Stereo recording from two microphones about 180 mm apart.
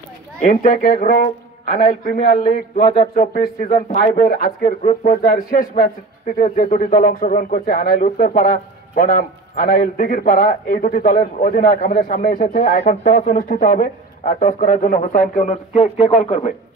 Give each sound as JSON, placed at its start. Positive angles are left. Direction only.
{"t": 0.4, "sound": "speech", "side_deg": 45}
{"t": 3.2, "sound": "speech", "side_deg": 45}